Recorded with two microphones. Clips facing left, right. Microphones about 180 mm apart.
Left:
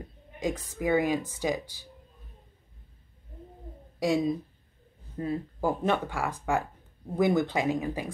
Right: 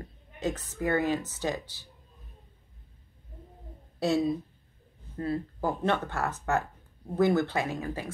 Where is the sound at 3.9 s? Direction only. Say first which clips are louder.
Even; 10° left (ahead or behind).